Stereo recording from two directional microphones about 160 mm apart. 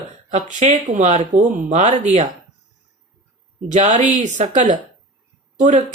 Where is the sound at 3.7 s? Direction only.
50° right (ahead or behind).